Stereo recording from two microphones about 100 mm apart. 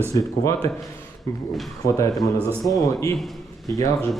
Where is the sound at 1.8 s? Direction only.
30° left (ahead or behind).